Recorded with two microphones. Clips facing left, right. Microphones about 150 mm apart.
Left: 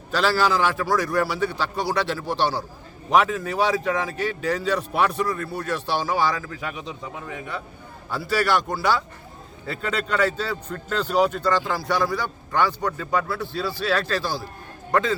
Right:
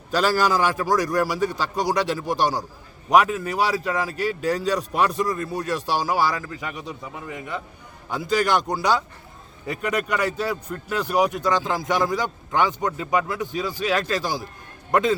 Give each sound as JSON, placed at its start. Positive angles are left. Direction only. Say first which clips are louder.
{"t": 0.1, "sound": "a man's voice", "louder": "right 1 dB", "side_deg": -15}